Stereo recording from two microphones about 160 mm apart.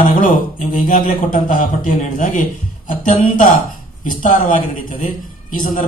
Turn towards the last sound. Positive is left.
turn(degrees=55)  # may be behind; listen again after turning